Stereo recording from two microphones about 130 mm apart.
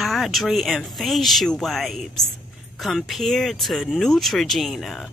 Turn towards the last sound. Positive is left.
turn(degrees=0)  # may be behind; listen again after turning